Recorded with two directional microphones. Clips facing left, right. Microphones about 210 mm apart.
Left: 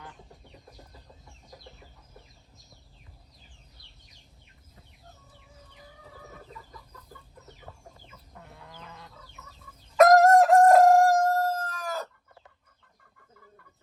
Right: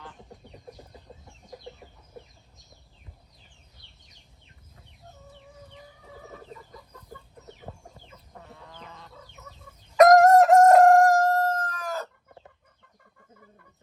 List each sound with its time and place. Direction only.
7.7 s chicken: 30° right (ahead or behind)
10.0 s crowing: centre (ahead or behind)